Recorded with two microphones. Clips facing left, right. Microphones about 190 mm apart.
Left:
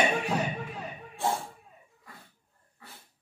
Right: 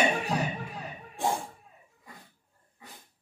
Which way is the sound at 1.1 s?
15° right (ahead or behind).